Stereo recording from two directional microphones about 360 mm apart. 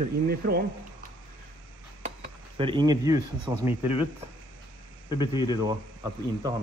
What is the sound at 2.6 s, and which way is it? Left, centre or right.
Speech, centre.